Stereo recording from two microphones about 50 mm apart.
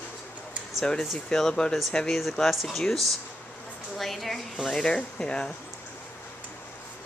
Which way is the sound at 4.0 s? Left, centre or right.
Centre.